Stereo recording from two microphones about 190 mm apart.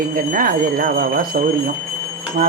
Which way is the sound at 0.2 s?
45° right (ahead or behind).